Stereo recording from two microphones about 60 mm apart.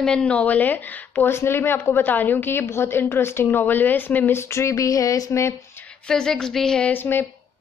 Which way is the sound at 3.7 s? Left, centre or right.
Left.